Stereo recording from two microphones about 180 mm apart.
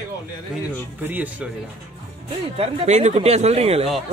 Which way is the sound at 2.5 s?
35° right (ahead or behind).